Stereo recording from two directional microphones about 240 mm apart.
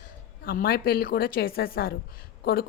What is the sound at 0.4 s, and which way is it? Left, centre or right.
A woman's voice, left.